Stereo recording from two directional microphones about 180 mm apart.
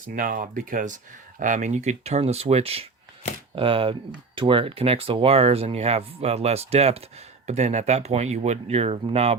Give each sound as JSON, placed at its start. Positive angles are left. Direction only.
{"t": 0.0, "sound": "speech", "side_deg": -50}